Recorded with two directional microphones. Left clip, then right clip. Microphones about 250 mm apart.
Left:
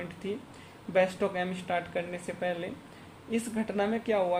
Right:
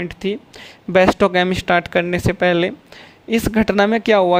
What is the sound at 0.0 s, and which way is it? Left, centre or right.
Speech, right.